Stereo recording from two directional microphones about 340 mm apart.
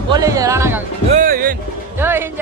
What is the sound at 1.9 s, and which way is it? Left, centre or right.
Speech, centre.